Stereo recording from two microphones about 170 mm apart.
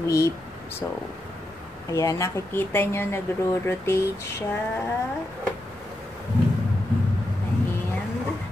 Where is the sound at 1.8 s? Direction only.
20° left (ahead or behind).